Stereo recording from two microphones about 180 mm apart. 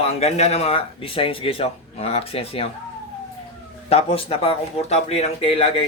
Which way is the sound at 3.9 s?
35° left (ahead or behind).